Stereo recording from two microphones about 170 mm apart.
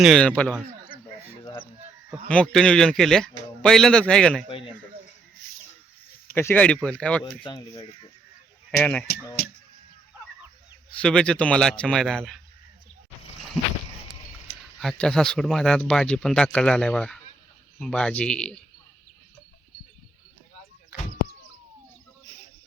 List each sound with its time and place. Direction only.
0.0 s speech: 5° left (ahead or behind)
2.2 s speech: 5° left (ahead or behind)
4.4 s speech: 30° left (ahead or behind)
6.3 s speech: 10° left (ahead or behind)
7.4 s speech: 25° left (ahead or behind)
8.8 s speech: 5° left (ahead or behind)
11.0 s speech: 5° left (ahead or behind)
14.8 s speech: 5° left (ahead or behind)